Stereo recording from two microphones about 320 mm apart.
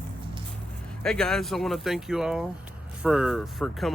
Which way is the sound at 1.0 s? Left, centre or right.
Centre.